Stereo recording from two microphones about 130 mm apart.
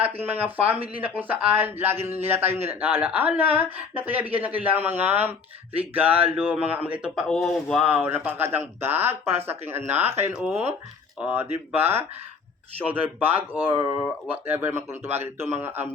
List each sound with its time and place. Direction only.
0.0 s speech: 15° right (ahead or behind)